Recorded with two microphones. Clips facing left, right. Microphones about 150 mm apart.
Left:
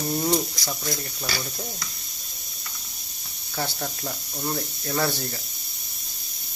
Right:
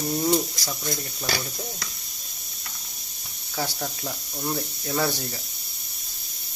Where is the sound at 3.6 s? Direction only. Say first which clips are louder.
Even; 5° right (ahead or behind).